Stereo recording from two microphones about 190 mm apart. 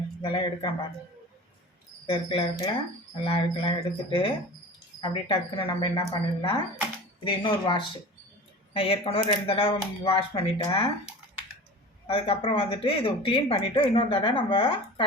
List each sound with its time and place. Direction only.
0.2 s speech: 25° left (ahead or behind)
2.0 s speech: 25° left (ahead or behind)
12.0 s speech: 30° left (ahead or behind)